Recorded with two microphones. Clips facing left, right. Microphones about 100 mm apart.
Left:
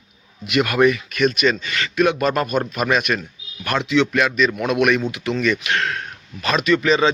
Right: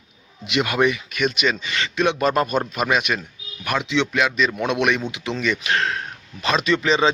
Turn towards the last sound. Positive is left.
turn(degrees=-25)  # may be behind; listen again after turning